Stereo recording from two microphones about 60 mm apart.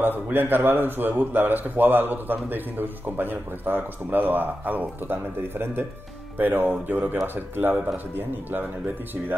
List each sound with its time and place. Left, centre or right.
0.0 s a man's voice: right